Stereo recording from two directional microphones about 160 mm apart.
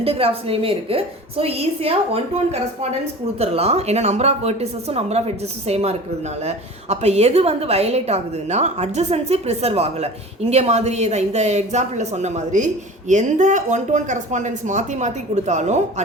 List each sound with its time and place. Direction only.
0.0 s a woman's voice: 35° right (ahead or behind)